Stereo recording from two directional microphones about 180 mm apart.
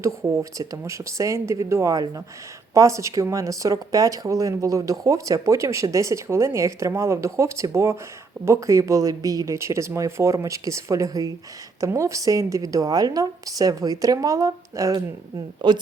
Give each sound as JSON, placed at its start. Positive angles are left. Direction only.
{"t": 0.0, "sound": "a woman's voice", "side_deg": -15}